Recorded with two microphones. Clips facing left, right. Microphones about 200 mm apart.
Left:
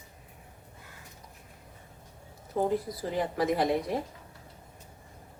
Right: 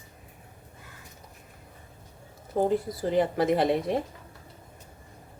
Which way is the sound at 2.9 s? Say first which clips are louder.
Right 6 dB; 25° right (ahead or behind).